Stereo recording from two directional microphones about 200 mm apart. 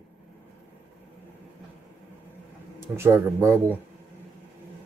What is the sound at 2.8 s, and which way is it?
Speech, 10° right (ahead or behind).